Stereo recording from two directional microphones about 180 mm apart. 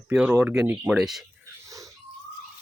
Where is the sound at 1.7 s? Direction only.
20° right (ahead or behind).